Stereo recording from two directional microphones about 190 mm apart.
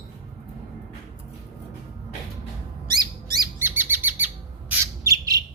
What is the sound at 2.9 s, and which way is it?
Bird, 20° right (ahead or behind).